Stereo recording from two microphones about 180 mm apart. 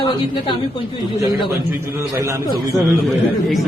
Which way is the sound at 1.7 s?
15° right (ahead or behind).